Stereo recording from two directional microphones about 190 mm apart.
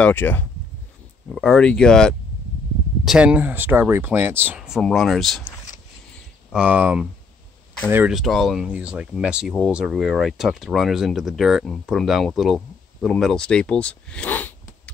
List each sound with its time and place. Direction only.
0.0 s speech: 10° left (ahead or behind)
6.5 s speech: 5° right (ahead or behind)